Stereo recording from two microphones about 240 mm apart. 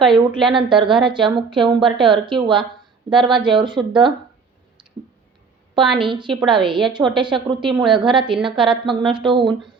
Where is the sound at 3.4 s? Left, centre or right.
Centre.